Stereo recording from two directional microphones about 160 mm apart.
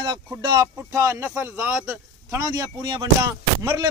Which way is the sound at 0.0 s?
25° right (ahead or behind).